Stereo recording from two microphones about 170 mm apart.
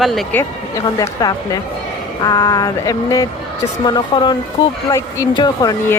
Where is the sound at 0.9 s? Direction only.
20° left (ahead or behind).